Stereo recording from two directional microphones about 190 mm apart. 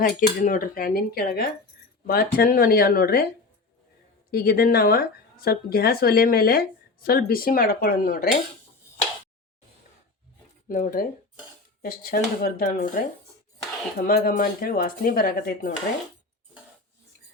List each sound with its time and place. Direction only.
0.0 s speech: 45° left (ahead or behind)
4.3 s speech: 50° left (ahead or behind)
10.7 s speech: 45° left (ahead or behind)
14.1 s speech: 50° left (ahead or behind)